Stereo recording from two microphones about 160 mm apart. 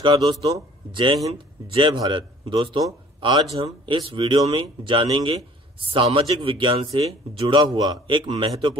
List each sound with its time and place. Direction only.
0.0 s a man's voice: 30° right (ahead or behind)